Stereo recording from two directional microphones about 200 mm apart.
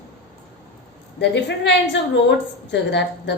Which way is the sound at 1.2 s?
60° left (ahead or behind).